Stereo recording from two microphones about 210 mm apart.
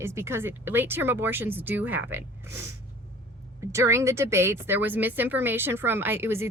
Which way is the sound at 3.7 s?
15° right (ahead or behind).